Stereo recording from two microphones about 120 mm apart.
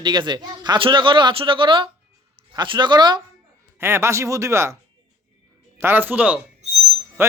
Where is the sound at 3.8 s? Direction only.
20° right (ahead or behind).